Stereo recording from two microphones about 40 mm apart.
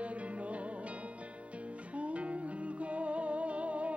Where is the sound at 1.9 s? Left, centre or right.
Right.